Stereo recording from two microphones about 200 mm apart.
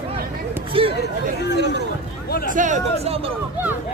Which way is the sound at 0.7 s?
25° right (ahead or behind).